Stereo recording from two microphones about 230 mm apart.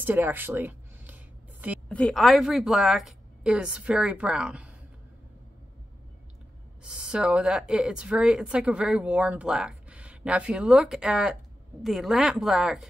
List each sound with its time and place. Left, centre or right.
0.0 s a sound: centre
1.9 s speech: centre
6.8 s speech: centre